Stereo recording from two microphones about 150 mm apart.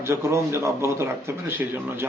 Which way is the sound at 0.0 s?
20° right (ahead or behind).